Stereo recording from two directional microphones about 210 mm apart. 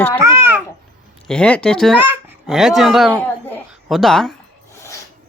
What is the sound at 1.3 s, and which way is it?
A child's voice, 5° left (ahead or behind).